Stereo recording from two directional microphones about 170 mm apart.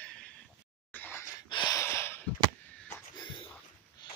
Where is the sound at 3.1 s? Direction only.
25° left (ahead or behind).